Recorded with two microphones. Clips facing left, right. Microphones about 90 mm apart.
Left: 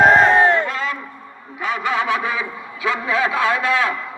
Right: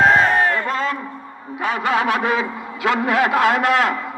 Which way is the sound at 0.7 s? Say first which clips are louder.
Right 3 dB; 40° right (ahead or behind).